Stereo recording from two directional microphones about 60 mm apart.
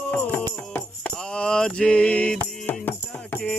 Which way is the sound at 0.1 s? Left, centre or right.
Left.